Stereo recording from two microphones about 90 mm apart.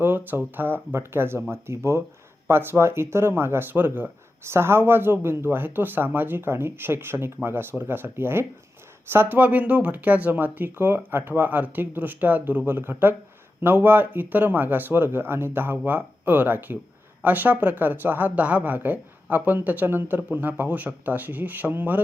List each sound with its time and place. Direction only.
0.0 s speech: 25° right (ahead or behind)